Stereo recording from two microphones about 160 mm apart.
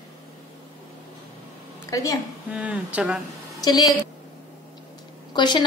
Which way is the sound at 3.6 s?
25° left (ahead or behind).